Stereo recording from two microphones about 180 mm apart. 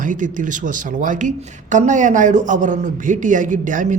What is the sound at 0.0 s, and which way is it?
Speech, 45° right (ahead or behind).